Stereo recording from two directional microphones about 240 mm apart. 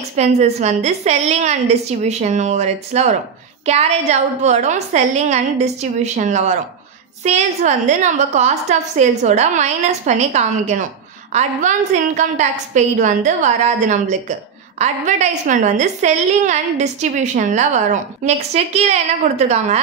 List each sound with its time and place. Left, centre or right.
0.1 s a woman's voice: right